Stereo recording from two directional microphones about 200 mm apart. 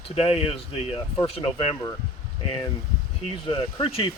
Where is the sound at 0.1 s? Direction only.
30° left (ahead or behind).